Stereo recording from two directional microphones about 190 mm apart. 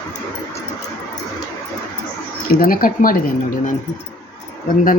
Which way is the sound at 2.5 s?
50° left (ahead or behind).